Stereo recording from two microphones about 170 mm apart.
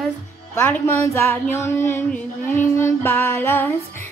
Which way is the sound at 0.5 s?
15° left (ahead or behind).